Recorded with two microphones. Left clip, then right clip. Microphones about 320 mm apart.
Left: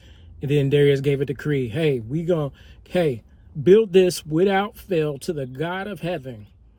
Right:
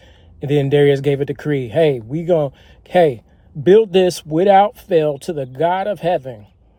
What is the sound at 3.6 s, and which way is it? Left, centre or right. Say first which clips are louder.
Speech: right 4 dB; centre.